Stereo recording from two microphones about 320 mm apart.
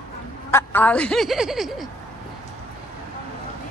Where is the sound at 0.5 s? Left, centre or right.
Centre.